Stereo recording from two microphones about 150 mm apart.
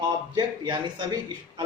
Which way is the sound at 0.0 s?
30° right (ahead or behind).